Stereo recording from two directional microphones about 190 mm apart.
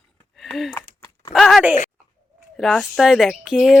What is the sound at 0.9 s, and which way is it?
Typing, 15° left (ahead or behind).